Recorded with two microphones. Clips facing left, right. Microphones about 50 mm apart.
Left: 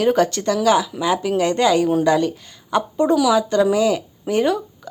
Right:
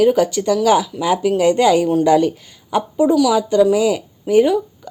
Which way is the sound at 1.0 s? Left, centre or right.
Right.